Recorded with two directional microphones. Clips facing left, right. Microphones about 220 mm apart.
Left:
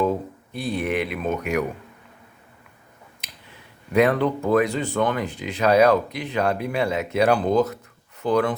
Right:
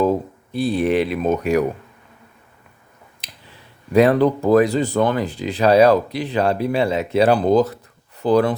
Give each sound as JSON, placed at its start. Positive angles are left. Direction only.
{"t": 0.5, "sound": "speech", "side_deg": -35}
{"t": 3.9, "sound": "speech", "side_deg": -35}